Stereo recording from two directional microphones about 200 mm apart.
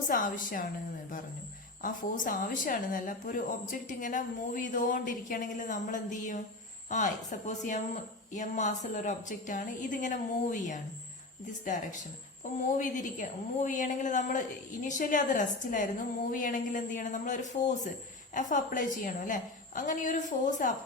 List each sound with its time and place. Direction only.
0.1 s speech: 40° left (ahead or behind)
1.8 s a woman's voice: 40° left (ahead or behind)
12.5 s a woman's voice: 40° left (ahead or behind)